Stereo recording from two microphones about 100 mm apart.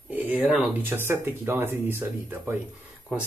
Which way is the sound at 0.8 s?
20° right (ahead or behind).